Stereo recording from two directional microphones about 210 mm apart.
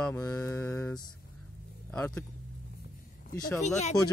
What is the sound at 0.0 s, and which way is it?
Mantra, 10° left (ahead or behind).